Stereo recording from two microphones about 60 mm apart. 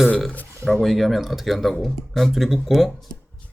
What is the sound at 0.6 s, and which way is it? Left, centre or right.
Speech, centre.